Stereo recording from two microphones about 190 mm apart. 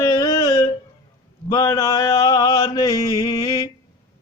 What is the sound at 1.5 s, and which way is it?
Mantra, 20° left (ahead or behind).